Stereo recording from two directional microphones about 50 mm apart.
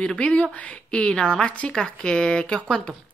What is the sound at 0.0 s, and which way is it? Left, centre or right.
Speech, centre.